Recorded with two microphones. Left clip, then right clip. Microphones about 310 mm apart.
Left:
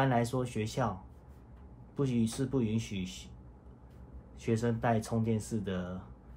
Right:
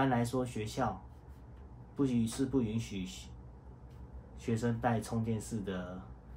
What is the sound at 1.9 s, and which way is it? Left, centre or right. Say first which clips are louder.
Speech: even; left.